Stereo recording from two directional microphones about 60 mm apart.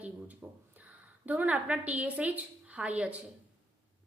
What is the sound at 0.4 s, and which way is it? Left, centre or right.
A woman's voice, centre.